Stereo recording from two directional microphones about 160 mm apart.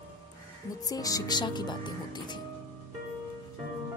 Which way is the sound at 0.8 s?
20° left (ahead or behind).